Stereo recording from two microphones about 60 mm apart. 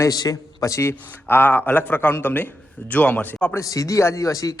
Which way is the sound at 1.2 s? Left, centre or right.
Left.